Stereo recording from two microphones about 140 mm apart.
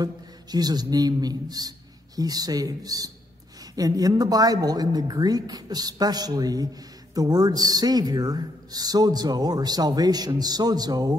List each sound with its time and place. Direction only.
0.0 s speech: 30° right (ahead or behind)